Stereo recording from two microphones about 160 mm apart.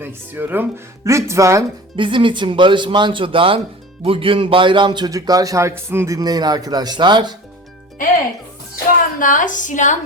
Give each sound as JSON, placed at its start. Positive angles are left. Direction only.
{"t": 0.0, "sound": "speech", "side_deg": -10}
{"t": 2.0, "sound": "a man's voice", "side_deg": -30}
{"t": 8.7, "sound": "a woman's voice", "side_deg": 60}